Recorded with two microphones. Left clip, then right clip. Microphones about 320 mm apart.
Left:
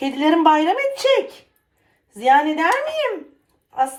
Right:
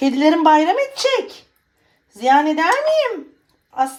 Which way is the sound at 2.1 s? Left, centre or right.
Right.